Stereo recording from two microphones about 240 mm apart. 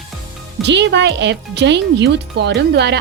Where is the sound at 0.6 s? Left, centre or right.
Right.